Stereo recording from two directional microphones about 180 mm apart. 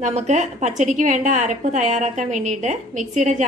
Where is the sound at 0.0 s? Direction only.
40° right (ahead or behind).